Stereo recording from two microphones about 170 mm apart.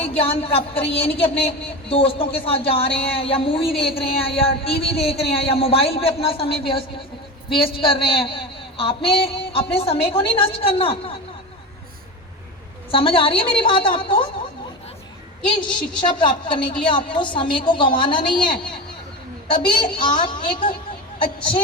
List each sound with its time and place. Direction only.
0.2 s speech: 35° left (ahead or behind)
12.9 s speech: 30° left (ahead or behind)
16.0 s a woman's voice: 25° left (ahead or behind)
19.8 s a woman's voice: 25° left (ahead or behind)